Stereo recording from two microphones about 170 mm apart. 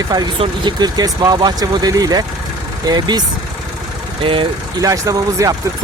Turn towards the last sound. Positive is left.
turn(degrees=-20)  # may be behind; listen again after turning